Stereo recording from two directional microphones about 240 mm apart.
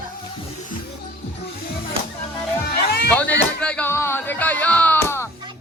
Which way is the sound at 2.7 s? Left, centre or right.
Left.